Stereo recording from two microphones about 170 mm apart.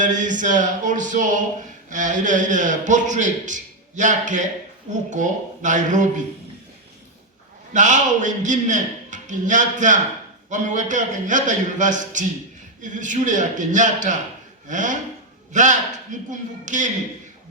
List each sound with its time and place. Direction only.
0.0 s a man's voice: 50° right (ahead or behind)
7.7 s a man's voice: 45° right (ahead or behind)